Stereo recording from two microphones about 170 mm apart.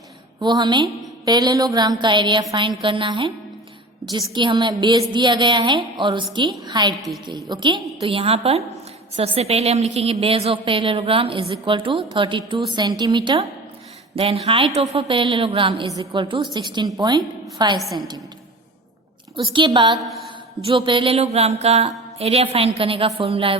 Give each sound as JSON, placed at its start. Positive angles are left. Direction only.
{"t": 0.3, "sound": "a woman's voice", "side_deg": -25}
{"t": 19.4, "sound": "a woman's voice", "side_deg": -30}